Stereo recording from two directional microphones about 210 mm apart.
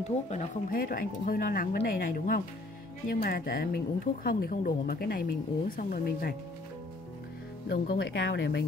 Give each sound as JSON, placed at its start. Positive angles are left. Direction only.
{"t": 0.0, "sound": "speech", "side_deg": 30}
{"t": 7.6, "sound": "speech", "side_deg": 50}